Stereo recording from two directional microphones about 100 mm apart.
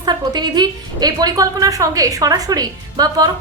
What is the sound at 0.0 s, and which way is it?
A woman's voice, 45° right (ahead or behind).